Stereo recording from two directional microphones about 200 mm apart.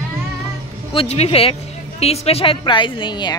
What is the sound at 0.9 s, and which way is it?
A woman's voice, 30° left (ahead or behind).